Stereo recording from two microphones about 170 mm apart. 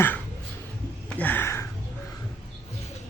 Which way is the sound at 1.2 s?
10° left (ahead or behind).